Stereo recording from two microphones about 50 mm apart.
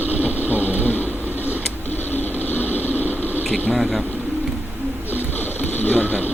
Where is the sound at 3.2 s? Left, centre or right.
Left.